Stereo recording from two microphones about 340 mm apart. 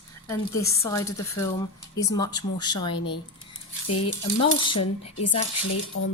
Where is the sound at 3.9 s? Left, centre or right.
Left.